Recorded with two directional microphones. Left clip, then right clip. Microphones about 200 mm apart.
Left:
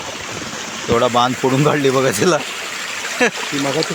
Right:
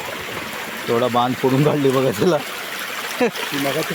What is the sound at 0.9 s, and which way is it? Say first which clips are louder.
Speech: left 4 dB; centre (ahead or behind).